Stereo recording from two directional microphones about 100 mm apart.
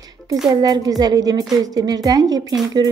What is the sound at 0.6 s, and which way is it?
A woman's voice, 40° right (ahead or behind).